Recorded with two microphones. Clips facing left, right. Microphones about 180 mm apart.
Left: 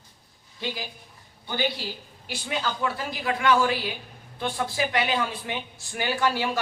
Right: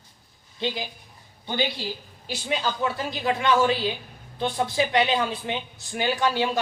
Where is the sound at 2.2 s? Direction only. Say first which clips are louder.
Right 2 dB; 20° right (ahead or behind).